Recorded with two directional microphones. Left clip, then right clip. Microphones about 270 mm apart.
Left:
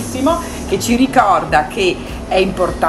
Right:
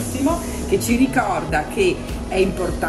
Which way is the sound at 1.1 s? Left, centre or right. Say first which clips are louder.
Left 9 dB; left.